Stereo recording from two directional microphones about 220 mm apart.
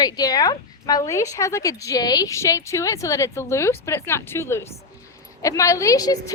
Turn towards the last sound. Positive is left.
turn(degrees=15)  # may be behind; listen again after turning